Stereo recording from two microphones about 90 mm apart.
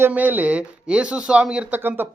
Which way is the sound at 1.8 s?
25° right (ahead or behind).